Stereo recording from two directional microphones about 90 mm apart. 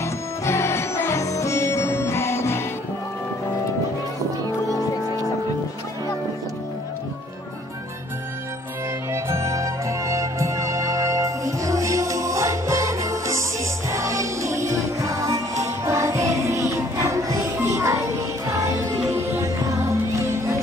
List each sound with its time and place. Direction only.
0.0 s music: 30° left (ahead or behind)
9.1 s music: 30° right (ahead or behind)